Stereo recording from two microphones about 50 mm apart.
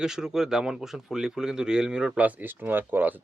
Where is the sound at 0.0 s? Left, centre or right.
Centre.